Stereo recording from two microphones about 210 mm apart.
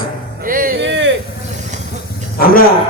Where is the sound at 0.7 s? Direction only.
60° right (ahead or behind).